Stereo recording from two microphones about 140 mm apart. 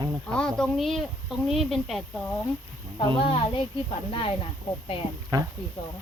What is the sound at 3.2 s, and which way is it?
A child's voice, 40° left (ahead or behind).